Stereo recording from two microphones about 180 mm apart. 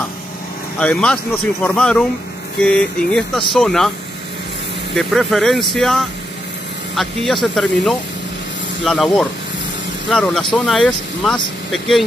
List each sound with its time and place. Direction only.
0.7 s speech: 5° left (ahead or behind)
4.9 s speech: centre (ahead or behind)